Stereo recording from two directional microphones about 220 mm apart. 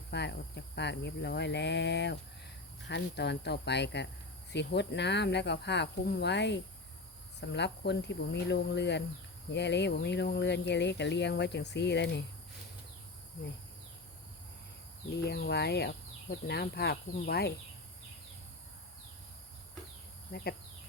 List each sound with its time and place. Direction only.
0.1 s speech: 50° left (ahead or behind)
15.1 s speech: 50° left (ahead or behind)
20.3 s speech: 50° left (ahead or behind)